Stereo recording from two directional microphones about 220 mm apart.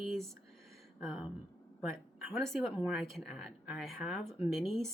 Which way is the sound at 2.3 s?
Centre (ahead or behind).